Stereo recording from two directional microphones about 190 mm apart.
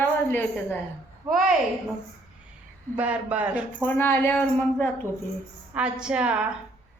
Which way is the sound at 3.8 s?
10° left (ahead or behind).